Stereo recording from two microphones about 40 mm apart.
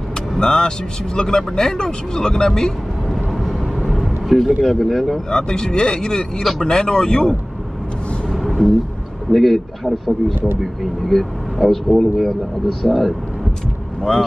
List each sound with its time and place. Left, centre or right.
0.4 s speech: centre
3.3 s vehicle: centre
3.8 s a sound: centre
4.6 s speech: centre
5.3 s speech: centre
8.4 s a sound: centre
9.3 s speech: centre